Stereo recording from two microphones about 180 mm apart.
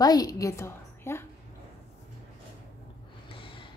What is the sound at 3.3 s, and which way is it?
Snort, 30° left (ahead or behind).